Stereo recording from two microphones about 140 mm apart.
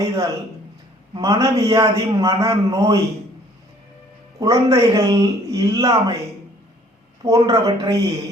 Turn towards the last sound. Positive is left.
turn(degrees=-25)  # may be behind; listen again after turning